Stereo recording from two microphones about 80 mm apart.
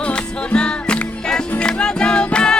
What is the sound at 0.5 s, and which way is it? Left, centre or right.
Music, centre.